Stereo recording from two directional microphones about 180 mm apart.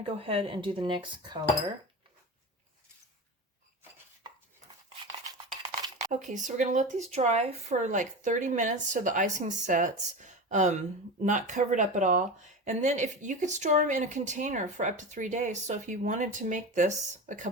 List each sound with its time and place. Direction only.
0.0 s speech: 30° right (ahead or behind)
5.0 s a sound: 20° right (ahead or behind)
6.1 s speech: 45° right (ahead or behind)